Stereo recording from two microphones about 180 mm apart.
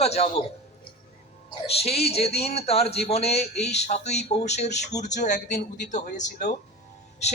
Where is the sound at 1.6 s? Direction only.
35° left (ahead or behind).